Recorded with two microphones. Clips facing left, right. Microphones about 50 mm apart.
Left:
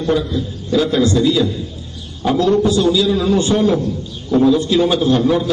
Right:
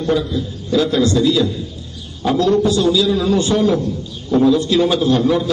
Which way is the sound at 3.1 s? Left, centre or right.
Centre.